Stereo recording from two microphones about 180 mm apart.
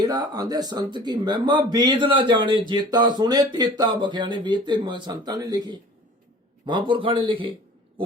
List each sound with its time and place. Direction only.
0.0 s speech: 20° right (ahead or behind)